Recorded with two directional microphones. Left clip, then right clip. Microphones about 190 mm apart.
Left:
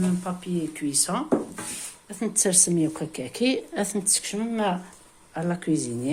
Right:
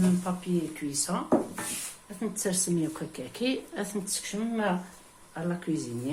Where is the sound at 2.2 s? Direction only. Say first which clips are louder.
Left 7 dB; 35° left (ahead or behind).